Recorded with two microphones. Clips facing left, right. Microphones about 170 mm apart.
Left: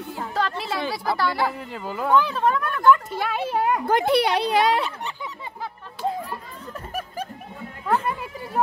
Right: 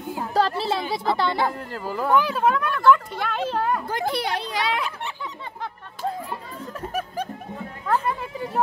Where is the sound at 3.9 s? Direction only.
70° left (ahead or behind).